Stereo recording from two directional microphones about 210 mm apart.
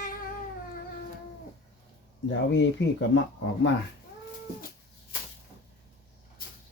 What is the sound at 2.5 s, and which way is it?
Speech, 60° left (ahead or behind).